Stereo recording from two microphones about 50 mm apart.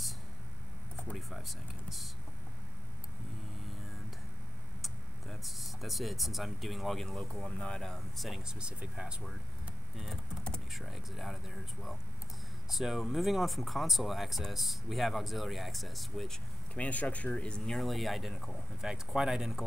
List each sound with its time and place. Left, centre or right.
1.1 s speech: centre
4.8 s speech: centre
7.3 s speech: left
8.4 s speech: centre
10.7 s speech: centre
16.7 s speech: left
17.7 s speech: centre